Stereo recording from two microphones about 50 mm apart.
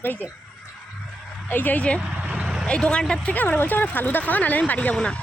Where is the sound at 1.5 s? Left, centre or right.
Left.